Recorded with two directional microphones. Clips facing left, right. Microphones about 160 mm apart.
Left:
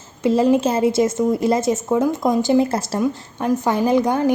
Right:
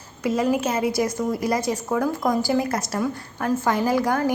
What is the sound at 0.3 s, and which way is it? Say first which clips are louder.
A woman's voice: left 6 dB; 30° left (ahead or behind).